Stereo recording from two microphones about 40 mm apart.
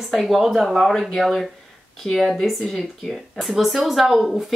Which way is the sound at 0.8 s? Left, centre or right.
Centre.